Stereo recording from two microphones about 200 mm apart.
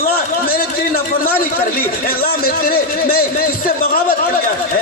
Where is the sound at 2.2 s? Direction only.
50° left (ahead or behind).